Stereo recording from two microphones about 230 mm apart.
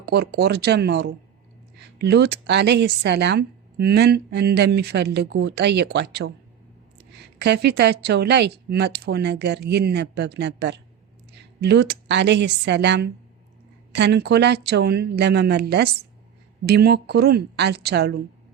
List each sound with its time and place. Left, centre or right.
0.0 s a woman's voice: right